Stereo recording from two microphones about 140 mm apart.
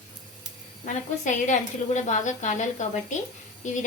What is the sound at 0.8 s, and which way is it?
Speech, 60° left (ahead or behind).